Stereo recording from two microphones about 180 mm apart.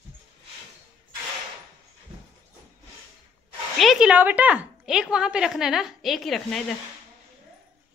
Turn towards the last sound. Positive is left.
turn(degrees=0)  # may be behind; listen again after turning